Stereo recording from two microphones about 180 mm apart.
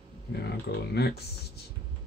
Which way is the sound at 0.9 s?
60° left (ahead or behind).